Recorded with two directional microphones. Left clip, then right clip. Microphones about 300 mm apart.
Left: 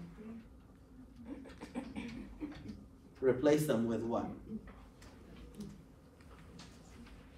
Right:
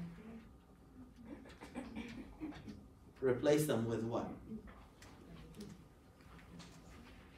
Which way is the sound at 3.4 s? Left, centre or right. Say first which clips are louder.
Left 1 dB; left.